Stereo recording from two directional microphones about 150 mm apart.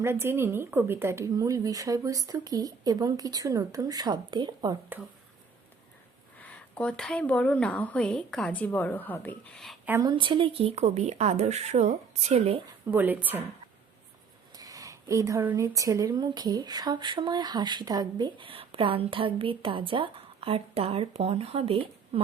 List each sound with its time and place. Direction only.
0.0 s speech: 15° right (ahead or behind)
6.3 s a woman's voice: 10° left (ahead or behind)
10.0 s speech: 30° right (ahead or behind)
12.9 s speech: 10° right (ahead or behind)
14.5 s speech: 25° right (ahead or behind); by 22.2 s 40° right (ahead or behind)